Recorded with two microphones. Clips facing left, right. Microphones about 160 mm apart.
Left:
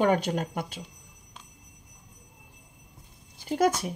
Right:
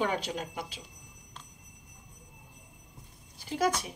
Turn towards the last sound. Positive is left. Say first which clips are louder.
# left 6 dB
turn(degrees=50)  # may be behind; listen again after turning